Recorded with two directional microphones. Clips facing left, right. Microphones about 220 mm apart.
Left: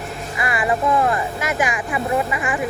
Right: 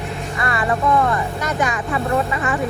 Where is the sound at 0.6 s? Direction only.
20° left (ahead or behind).